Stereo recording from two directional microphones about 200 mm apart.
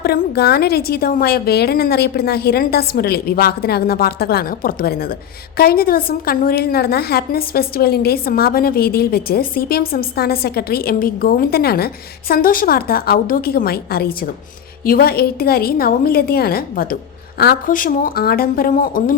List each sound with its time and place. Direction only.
0.0 s a woman's voice: 50° left (ahead or behind)